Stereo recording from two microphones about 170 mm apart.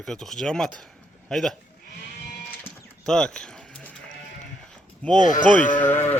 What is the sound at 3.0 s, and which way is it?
Speech, 5° left (ahead or behind).